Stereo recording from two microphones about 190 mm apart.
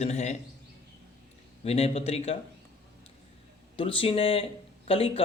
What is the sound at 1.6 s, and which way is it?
Speech, 35° left (ahead or behind).